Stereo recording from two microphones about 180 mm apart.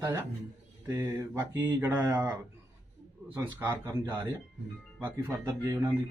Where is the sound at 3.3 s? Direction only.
15° right (ahead or behind).